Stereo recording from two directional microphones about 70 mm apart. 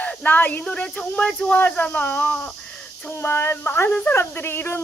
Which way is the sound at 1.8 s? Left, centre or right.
Left.